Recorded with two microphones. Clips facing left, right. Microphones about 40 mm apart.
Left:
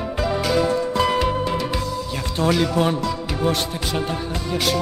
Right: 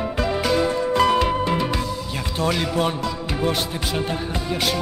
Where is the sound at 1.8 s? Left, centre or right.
Centre.